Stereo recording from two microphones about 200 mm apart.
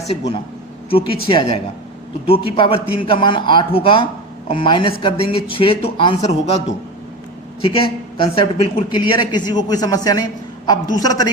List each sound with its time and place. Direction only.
0.9 s a woman's voice: 25° left (ahead or behind)
7.6 s a woman's voice: 25° left (ahead or behind)